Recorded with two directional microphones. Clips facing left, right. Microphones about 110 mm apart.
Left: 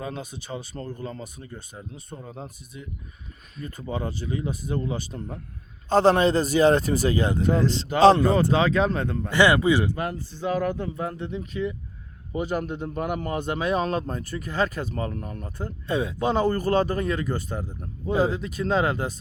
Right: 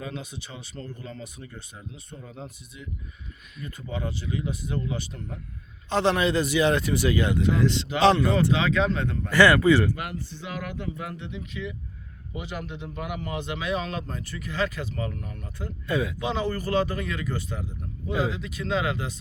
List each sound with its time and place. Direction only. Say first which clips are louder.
0.0 s speech: left 2 dB; 40° left (ahead or behind)
9.3 s a man's voice: right 1 dB; 20° left (ahead or behind)
10.0 s speech: left 6 dB; 35° left (ahead or behind)
15.9 s a man's voice: left 1 dB; 30° left (ahead or behind)
16.2 s speech: left 5 dB; 45° left (ahead or behind)